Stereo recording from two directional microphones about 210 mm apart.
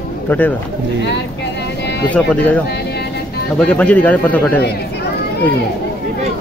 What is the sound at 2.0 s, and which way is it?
Speech, 5° left (ahead or behind).